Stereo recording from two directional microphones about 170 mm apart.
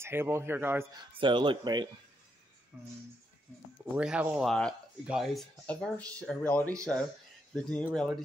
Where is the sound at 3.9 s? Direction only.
5° right (ahead or behind).